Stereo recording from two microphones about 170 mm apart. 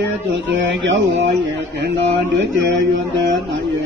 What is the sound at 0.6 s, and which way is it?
Speech, 90° right.